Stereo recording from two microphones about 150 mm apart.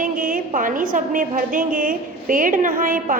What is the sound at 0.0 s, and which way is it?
A woman's voice, 65° right (ahead or behind).